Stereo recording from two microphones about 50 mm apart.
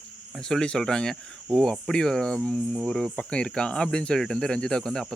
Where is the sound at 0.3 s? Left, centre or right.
Centre.